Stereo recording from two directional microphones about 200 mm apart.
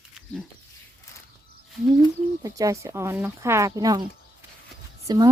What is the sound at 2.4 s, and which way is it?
Speech, 15° right (ahead or behind).